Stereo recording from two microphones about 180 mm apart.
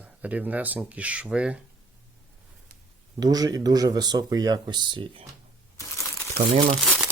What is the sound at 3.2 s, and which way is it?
Speech, 20° right (ahead or behind).